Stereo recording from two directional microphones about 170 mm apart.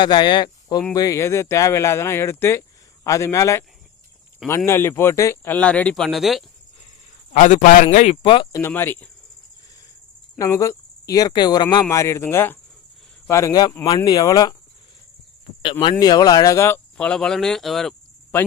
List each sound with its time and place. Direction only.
0.0 s speech: 25° left (ahead or behind); by 6.4 s centre (ahead or behind)
7.3 s a man's voice: 45° left (ahead or behind); by 8.4 s 30° left (ahead or behind)
8.5 s speech: 15° left (ahead or behind)
10.3 s speech: 20° left (ahead or behind)
15.8 s speech: 25° left (ahead or behind); by 18.4 s 5° left (ahead or behind)